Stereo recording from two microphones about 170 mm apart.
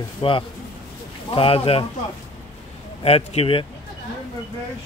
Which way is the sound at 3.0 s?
35° left (ahead or behind).